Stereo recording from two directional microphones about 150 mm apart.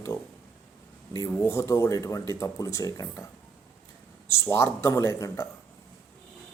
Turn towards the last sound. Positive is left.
turn(degrees=20)  # may be behind; listen again after turning